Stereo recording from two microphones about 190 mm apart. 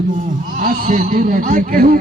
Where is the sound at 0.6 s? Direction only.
45° right (ahead or behind).